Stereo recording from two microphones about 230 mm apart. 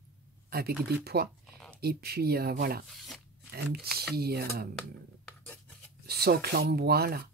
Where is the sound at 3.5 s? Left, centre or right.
Right.